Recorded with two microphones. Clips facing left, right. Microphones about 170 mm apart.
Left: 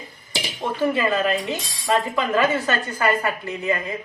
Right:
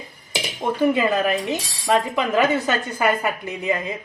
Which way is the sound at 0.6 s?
15° right (ahead or behind).